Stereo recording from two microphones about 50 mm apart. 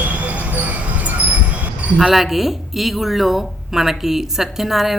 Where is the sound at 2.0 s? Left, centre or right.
Centre.